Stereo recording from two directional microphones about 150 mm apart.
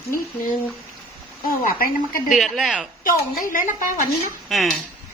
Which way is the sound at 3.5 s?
60° left (ahead or behind).